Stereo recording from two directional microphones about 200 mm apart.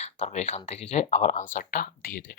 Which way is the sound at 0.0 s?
35° left (ahead or behind).